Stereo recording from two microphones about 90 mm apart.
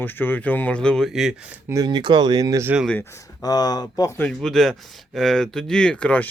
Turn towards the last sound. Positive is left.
turn(degrees=15)  # may be behind; listen again after turning